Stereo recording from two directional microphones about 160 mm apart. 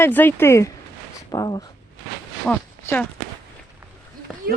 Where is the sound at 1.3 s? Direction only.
25° left (ahead or behind).